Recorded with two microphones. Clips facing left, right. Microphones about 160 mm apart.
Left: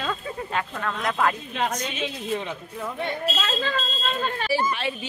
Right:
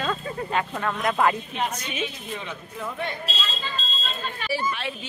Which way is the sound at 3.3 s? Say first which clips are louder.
Left 7 dB; 75° left (ahead or behind).